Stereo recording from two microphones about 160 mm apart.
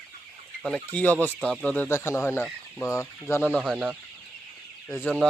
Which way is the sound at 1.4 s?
Centre (ahead or behind).